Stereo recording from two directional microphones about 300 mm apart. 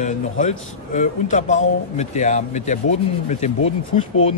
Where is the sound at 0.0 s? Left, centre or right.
Left.